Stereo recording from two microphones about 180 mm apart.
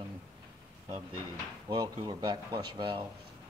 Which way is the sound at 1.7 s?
25° right (ahead or behind).